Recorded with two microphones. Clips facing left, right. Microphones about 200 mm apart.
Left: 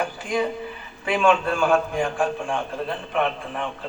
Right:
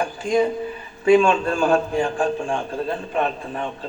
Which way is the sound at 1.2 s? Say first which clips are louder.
Right 1 dB; 30° right (ahead or behind).